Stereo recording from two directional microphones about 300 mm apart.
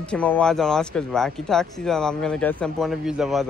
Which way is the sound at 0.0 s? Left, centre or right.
Centre.